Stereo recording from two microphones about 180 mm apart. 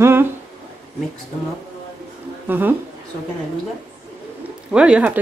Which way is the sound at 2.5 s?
10° right (ahead or behind).